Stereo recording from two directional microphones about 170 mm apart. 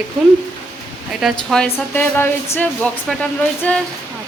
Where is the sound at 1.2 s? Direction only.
Centre (ahead or behind).